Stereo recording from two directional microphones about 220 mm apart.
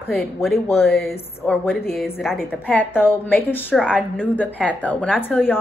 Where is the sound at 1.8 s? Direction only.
45° left (ahead or behind).